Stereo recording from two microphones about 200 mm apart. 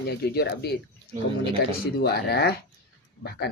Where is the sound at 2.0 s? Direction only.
55° left (ahead or behind).